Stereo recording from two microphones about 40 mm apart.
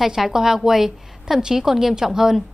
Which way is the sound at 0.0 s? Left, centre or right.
Centre.